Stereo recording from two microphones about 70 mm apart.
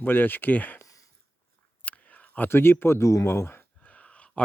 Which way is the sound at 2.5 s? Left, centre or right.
Left.